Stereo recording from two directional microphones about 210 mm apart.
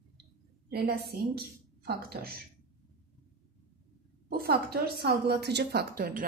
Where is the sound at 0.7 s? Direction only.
50° right (ahead or behind).